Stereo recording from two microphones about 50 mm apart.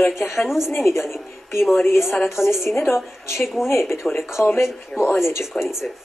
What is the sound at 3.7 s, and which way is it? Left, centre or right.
A woman's voice, left.